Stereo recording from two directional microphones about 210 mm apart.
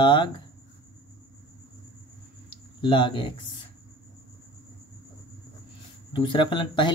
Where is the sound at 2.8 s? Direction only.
20° left (ahead or behind).